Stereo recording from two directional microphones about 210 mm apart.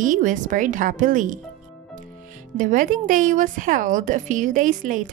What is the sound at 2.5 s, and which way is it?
Speech, 40° right (ahead or behind).